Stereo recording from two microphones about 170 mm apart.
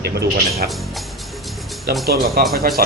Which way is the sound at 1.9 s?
65° right (ahead or behind).